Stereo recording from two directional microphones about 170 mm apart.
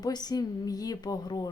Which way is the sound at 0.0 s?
25° left (ahead or behind).